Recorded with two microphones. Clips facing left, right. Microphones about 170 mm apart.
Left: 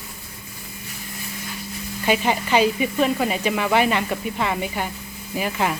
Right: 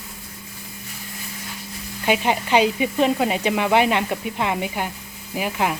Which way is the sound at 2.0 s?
15° right (ahead or behind).